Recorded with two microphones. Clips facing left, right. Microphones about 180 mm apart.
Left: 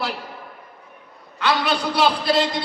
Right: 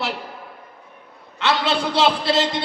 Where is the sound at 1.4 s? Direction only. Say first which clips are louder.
Even; 25° right (ahead or behind).